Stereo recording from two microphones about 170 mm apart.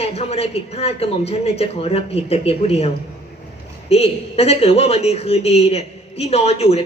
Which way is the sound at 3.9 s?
35° left (ahead or behind).